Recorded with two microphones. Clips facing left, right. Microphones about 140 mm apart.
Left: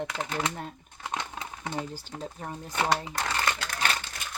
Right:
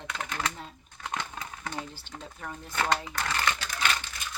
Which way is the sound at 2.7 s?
20° left (ahead or behind).